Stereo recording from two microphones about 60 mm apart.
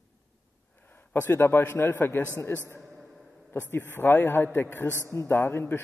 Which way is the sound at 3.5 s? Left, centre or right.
Left.